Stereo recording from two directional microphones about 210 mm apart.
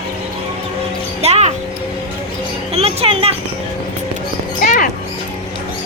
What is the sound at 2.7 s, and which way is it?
Speech, 30° right (ahead or behind).